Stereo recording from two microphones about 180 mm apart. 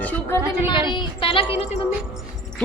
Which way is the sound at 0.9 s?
25° left (ahead or behind).